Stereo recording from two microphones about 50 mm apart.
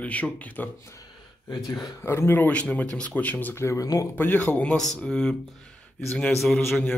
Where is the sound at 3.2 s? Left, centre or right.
Left.